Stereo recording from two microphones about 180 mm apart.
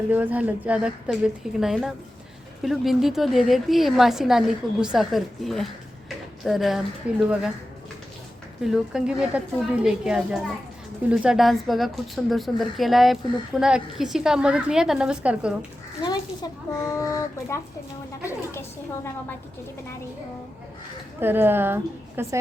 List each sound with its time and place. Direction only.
0.1 s a woman's voice: 10° right (ahead or behind)
8.6 s a woman's voice: 5° right (ahead or behind)
16.0 s a child's voice: 25° left (ahead or behind)
21.2 s a woman's voice: 10° right (ahead or behind)